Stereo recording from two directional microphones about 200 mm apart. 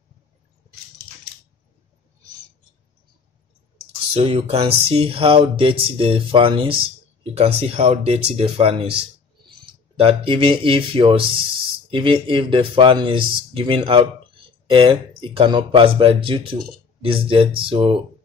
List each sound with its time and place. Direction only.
4.1 s speech: 30° right (ahead or behind)